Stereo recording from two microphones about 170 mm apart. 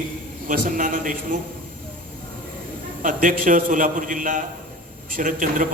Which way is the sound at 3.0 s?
50° right (ahead or behind).